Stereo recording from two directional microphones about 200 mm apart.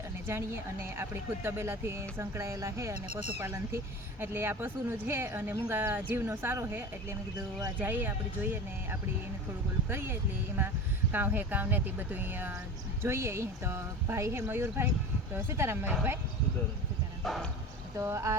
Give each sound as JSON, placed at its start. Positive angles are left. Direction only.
{"t": 0.3, "sound": "speech", "side_deg": -10}
{"t": 9.9, "sound": "speech", "side_deg": -10}
{"t": 17.2, "sound": "speech", "side_deg": 0}
{"t": 17.9, "sound": "speech", "side_deg": -15}